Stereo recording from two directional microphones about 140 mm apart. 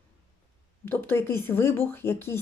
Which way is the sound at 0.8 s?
15° left (ahead or behind).